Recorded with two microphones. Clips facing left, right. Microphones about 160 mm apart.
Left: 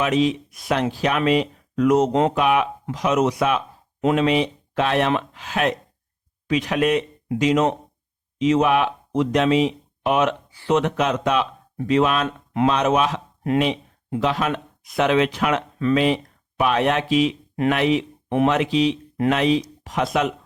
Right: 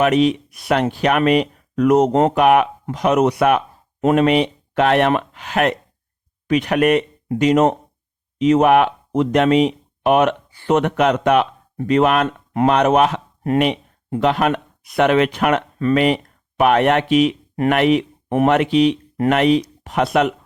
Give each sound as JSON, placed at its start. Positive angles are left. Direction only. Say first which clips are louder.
{"t": 0.0, "sound": "speech", "louder": "right 5 dB", "side_deg": -65}
{"t": 4.0, "sound": "speech", "louder": "right 4 dB", "side_deg": -50}
{"t": 18.3, "sound": "speech", "louder": "right 4 dB", "side_deg": -50}